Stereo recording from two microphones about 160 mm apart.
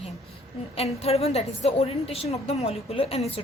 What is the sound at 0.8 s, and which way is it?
A woman's voice, 40° left (ahead or behind).